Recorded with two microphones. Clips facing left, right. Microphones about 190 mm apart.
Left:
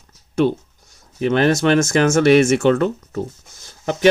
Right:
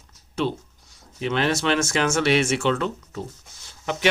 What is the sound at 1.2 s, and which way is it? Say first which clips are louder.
Speech: left 7 dB; 50° left (ahead or behind).